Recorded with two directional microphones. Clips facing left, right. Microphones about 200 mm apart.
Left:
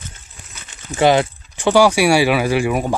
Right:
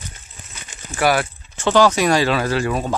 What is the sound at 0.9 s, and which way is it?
Speech, 20° left (ahead or behind).